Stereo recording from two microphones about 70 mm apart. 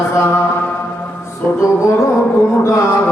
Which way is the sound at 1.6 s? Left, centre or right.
Left.